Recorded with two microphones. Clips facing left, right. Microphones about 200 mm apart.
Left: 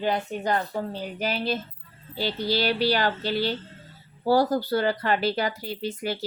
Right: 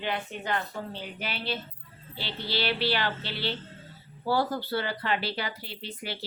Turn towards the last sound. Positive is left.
turn(degrees=45)  # may be behind; listen again after turning